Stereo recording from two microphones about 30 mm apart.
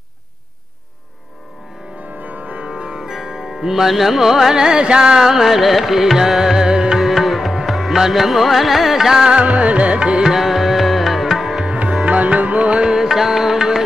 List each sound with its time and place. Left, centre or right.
2.1 s music: right
2.6 s music: right
3.0 s music: centre
4.6 s music: right
5.3 s carnatic music: centre
6.1 s music: centre
7.0 s music: centre
8.1 s carnatic music: centre
9.4 s music: right
10.3 s music: centre
11.6 s music: right
12.8 s music: centre